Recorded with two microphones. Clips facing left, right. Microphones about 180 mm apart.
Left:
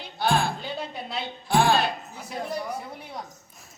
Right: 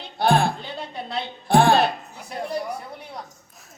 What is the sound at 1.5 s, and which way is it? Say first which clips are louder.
Music: right 5 dB; 60° right (ahead or behind).